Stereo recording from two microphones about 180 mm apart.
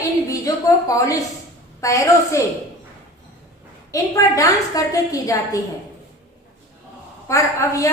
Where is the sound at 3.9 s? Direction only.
20° left (ahead or behind).